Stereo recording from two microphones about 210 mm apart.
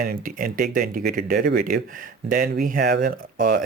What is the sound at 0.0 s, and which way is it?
Speech, 45° right (ahead or behind).